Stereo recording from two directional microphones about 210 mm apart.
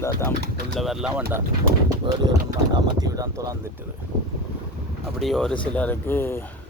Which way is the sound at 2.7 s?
15° right (ahead or behind).